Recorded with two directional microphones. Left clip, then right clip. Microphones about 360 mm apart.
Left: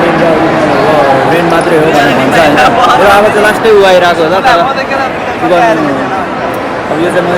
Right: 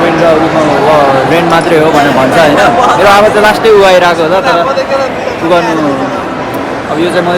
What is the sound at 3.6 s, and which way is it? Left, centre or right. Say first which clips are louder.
Speech: even; centre.